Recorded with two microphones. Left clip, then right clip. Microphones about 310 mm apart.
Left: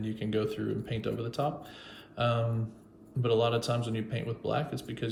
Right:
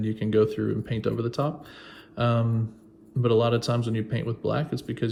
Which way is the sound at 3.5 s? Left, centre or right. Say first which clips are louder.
Right 4 dB; centre.